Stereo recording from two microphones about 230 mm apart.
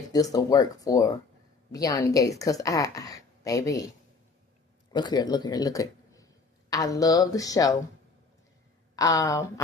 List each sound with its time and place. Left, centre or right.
0.1 s speech: centre
4.9 s speech: centre
9.0 s speech: centre